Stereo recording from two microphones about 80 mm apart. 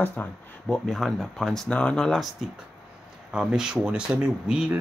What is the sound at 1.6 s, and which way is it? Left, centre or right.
Speech, centre.